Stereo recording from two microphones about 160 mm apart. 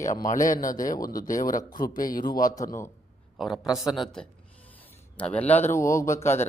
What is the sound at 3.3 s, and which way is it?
A man's voice, centre (ahead or behind).